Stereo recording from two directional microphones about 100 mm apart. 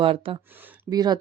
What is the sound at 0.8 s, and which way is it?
Speech, 45° right (ahead or behind).